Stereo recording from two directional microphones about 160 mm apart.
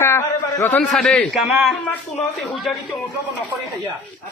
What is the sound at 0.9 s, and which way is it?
A man's voice, 5° left (ahead or behind).